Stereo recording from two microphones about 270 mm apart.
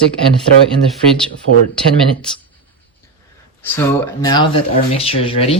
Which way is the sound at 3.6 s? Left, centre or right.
Centre.